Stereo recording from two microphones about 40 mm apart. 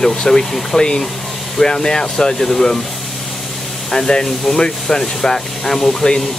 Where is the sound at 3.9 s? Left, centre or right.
Centre.